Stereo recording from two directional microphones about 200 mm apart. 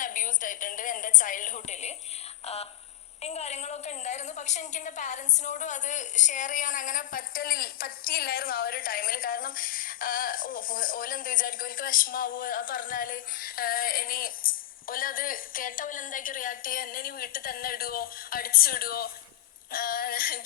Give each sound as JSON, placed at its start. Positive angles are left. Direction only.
{"t": 0.0, "sound": "a woman's voice", "side_deg": 40}
{"t": 3.2, "sound": "a woman's voice", "side_deg": 30}